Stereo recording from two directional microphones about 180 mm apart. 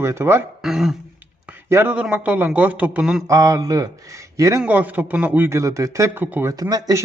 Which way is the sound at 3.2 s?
20° right (ahead or behind).